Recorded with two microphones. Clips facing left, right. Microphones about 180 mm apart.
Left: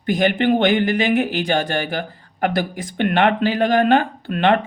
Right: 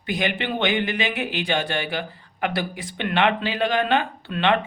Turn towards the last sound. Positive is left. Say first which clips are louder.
# left 4 dB
turn(degrees=45)  # may be behind; listen again after turning